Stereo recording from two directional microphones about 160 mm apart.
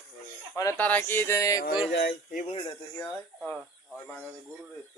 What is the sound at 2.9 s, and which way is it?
A man's voice, 20° left (ahead or behind).